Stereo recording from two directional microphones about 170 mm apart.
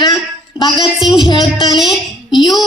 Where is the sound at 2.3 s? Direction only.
25° left (ahead or behind).